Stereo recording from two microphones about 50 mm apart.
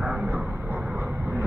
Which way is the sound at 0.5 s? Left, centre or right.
Right.